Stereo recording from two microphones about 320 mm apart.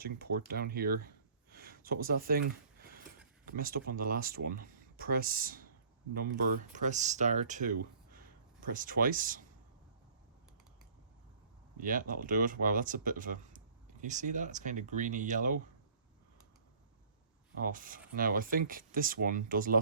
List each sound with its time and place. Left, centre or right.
0.0 s speech: right
3.4 s speech: right
6.8 s speech: right
11.8 s speech: right
17.6 s speech: right